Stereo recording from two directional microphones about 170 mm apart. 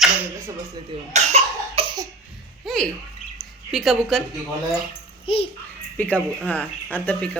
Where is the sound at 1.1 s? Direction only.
35° right (ahead or behind).